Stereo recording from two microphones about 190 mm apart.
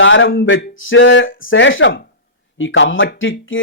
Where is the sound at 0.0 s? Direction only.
90° left.